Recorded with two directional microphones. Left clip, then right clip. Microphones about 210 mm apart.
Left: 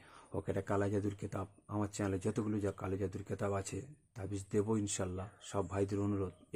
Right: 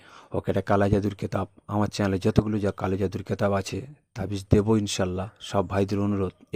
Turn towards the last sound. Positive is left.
turn(degrees=-35)  # may be behind; listen again after turning